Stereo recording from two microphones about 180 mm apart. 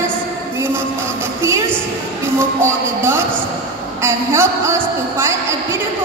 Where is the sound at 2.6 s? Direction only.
15° right (ahead or behind).